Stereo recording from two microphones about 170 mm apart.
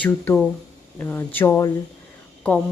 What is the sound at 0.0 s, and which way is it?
Speech, 10° left (ahead or behind).